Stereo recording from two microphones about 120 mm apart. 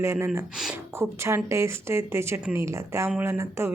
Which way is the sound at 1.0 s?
20° right (ahead or behind).